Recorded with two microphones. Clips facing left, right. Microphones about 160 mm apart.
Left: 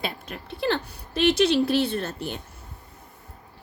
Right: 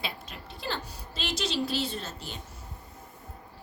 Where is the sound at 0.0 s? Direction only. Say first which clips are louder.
Left 6 dB; 60° left (ahead or behind).